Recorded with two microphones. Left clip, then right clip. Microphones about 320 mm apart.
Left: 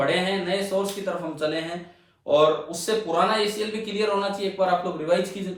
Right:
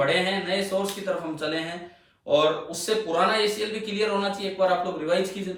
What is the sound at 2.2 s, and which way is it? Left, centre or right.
Speech, centre.